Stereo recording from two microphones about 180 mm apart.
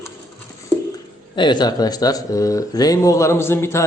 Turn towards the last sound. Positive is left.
turn(degrees=15)  # may be behind; listen again after turning